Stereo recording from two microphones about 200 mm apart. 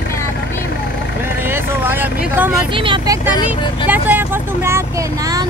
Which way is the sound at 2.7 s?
25° right (ahead or behind).